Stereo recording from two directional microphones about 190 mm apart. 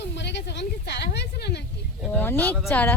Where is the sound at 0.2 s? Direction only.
65° left (ahead or behind).